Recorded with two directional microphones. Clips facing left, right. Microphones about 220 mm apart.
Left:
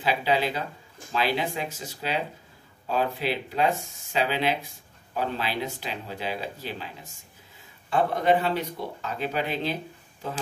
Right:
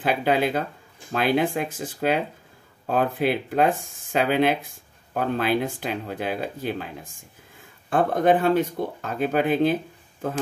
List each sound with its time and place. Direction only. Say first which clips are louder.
0.0 s speech: right 3 dB; 50° right (ahead or behind)